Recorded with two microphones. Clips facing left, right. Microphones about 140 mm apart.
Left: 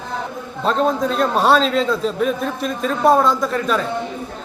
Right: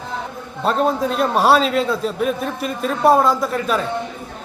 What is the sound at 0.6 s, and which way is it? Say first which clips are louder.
A man's voice: even; 5° right (ahead or behind).